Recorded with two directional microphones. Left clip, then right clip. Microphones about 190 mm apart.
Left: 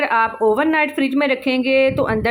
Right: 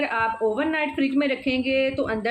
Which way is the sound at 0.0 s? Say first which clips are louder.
Left 7 dB; 25° left (ahead or behind).